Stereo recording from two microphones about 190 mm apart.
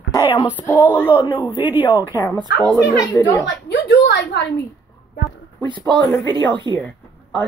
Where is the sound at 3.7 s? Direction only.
60° left (ahead or behind).